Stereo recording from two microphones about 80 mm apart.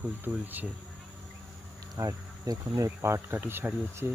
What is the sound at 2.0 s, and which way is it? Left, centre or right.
Insect, right.